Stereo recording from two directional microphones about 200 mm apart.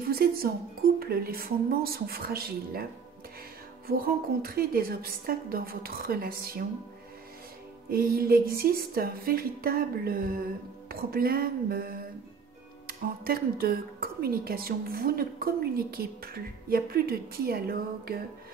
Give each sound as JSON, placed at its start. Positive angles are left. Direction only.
{"t": 0.1, "sound": "a woman's voice", "side_deg": -50}
{"t": 7.9, "sound": "a woman's voice", "side_deg": -50}